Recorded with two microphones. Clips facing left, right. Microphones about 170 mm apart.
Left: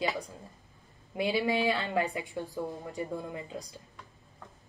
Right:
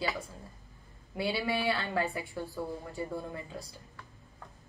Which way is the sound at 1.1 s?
20° left (ahead or behind).